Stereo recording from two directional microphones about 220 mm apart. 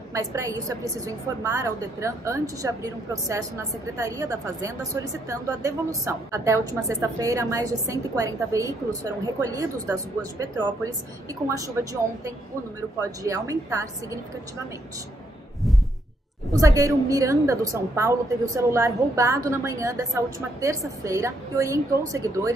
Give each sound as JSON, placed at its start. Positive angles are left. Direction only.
{"t": 0.1, "sound": "a woman's voice", "side_deg": -15}
{"t": 16.5, "sound": "a woman's voice", "side_deg": -15}